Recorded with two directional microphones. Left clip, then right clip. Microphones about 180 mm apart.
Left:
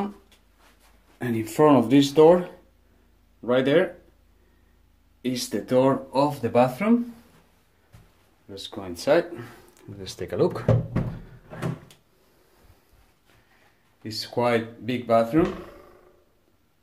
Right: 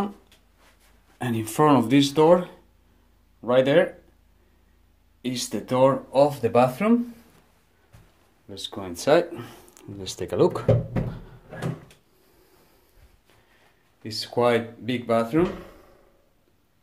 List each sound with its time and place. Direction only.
1.1 s speech: 25° right (ahead or behind)
5.2 s speech: 15° right (ahead or behind)
8.5 s speech: 15° right (ahead or behind)
14.0 s speech: 10° right (ahead or behind)